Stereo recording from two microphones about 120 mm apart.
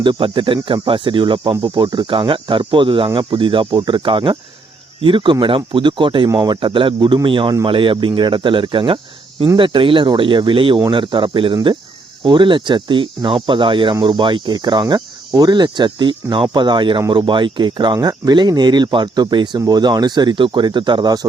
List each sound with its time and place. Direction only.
0.0 s speech: 45° right (ahead or behind)